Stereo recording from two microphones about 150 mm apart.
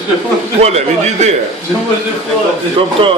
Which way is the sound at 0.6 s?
45° right (ahead or behind).